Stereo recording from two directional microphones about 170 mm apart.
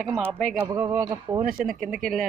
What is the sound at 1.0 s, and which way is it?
Speech, 25° right (ahead or behind).